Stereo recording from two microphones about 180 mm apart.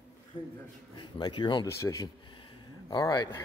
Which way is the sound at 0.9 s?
25° left (ahead or behind).